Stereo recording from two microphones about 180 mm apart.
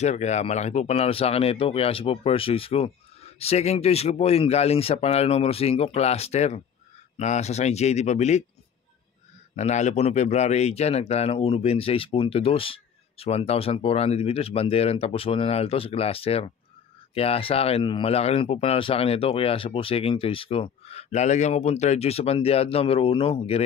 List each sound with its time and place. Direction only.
0.0 s speech: 40° left (ahead or behind)
9.6 s speech: 40° left (ahead or behind)